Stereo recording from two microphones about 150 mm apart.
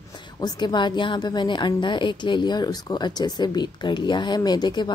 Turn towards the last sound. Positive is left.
turn(degrees=30)  # may be behind; listen again after turning